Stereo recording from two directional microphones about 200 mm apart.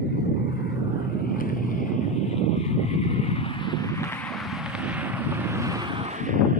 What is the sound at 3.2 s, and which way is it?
Vehicle, 30° left (ahead or behind).